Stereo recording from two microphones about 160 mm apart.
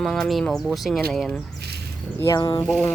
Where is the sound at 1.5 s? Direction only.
90° right.